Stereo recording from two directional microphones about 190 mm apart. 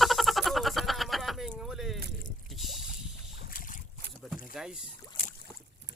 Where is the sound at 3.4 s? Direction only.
50° left (ahead or behind).